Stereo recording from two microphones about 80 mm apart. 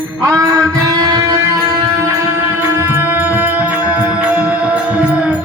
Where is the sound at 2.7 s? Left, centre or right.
Right.